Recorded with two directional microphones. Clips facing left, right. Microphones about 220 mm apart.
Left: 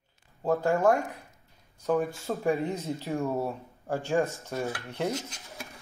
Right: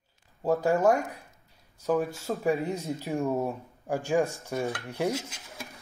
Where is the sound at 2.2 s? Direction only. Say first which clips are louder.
Even; centre (ahead or behind).